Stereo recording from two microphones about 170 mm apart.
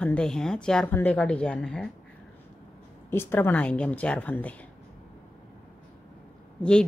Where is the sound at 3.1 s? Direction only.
15° left (ahead or behind).